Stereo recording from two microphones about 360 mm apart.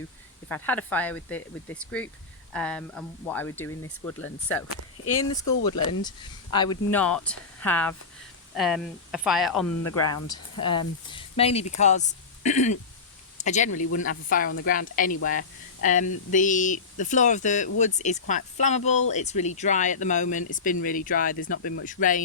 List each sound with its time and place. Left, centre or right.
0.4 s speech: centre
6.0 s speech: centre
9.8 s speech: left
10.2 s speech: centre